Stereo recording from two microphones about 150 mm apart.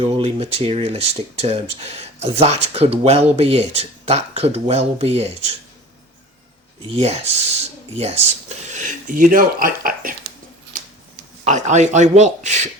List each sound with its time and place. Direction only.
0.0 s speech: 40° right (ahead or behind)
6.8 s speech: 45° right (ahead or behind); by 10.2 s 70° right (ahead or behind)
11.4 s speech: 50° right (ahead or behind)